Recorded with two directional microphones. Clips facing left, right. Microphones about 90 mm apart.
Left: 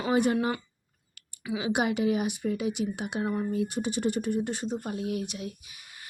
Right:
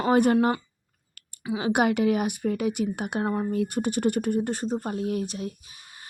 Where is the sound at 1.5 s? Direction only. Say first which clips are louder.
Right 4 dB; 55° right (ahead or behind).